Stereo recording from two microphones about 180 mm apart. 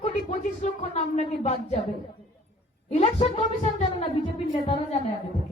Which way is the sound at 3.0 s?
35° left (ahead or behind).